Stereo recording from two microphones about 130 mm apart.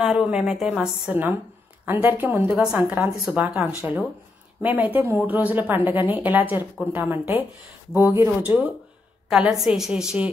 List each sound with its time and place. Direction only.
0.0 s a woman's voice: 5° right (ahead or behind)